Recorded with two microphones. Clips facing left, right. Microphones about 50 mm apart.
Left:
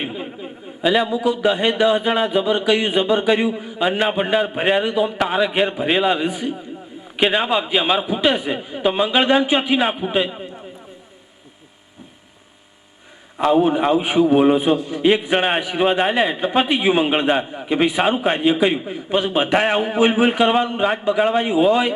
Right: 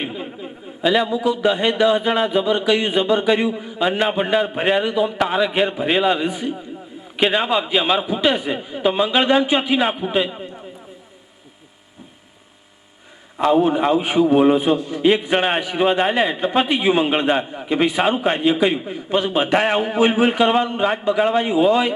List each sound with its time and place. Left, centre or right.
0.0 s a sound: centre
0.8 s a man's voice: centre
13.4 s a man's voice: centre
17.4 s a man's voice: centre
17.7 s a man's voice: centre